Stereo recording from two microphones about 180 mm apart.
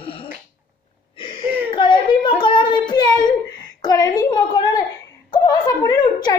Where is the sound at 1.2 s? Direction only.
25° left (ahead or behind).